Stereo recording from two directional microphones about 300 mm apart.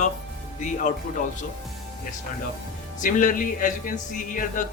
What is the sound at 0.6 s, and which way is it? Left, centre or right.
Speech, left.